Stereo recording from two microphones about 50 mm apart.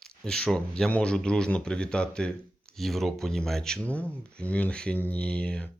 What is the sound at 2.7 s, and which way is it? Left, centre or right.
Speech, centre.